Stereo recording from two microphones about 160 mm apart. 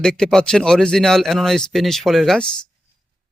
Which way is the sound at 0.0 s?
5° left (ahead or behind).